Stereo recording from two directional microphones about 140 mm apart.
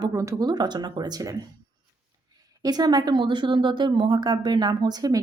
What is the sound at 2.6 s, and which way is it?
Speech, 30° right (ahead or behind).